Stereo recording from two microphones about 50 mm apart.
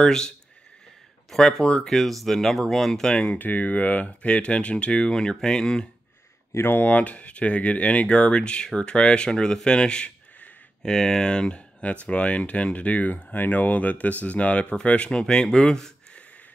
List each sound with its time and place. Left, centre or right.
0.0 s speech: centre
1.3 s speech: centre
3.3 s speech: left; by 5.9 s centre
6.8 s speech: left; by 15.9 s centre